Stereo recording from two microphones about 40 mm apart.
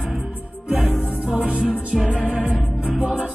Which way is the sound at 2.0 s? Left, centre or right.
Centre.